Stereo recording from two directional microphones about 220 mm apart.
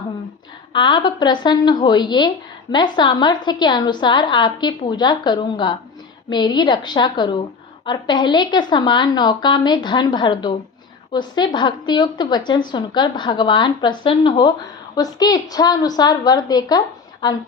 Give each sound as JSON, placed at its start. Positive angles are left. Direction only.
{"t": 0.7, "sound": "a woman's voice", "side_deg": 20}